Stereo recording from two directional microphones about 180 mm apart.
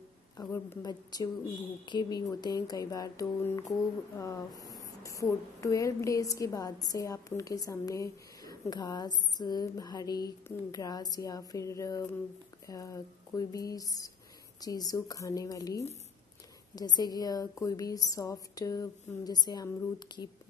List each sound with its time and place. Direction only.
0.4 s speech: 20° left (ahead or behind)